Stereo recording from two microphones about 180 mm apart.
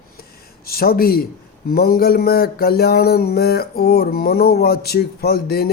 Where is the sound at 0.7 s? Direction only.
55° left (ahead or behind).